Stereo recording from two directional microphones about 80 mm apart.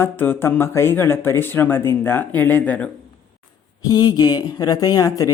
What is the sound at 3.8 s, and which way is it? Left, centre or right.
Speech, left.